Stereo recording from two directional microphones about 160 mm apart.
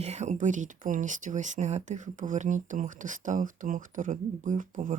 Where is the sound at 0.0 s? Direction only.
45° right (ahead or behind).